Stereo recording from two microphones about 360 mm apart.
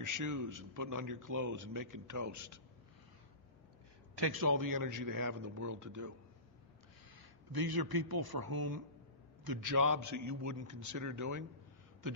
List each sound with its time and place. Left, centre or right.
0.0 s a man's voice: right
4.1 s a man's voice: right
7.2 s a man's voice: right